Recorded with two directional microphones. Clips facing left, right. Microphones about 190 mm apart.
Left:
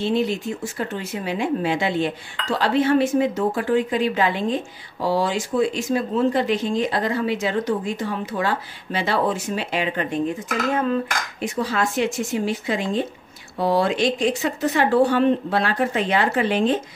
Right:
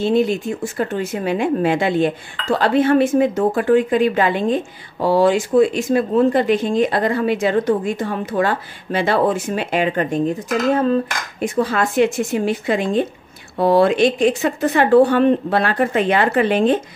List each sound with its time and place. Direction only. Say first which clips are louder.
0.0 s speech: right 5 dB; 50° right (ahead or behind)
11.4 s speech: right 5 dB; 55° right (ahead or behind)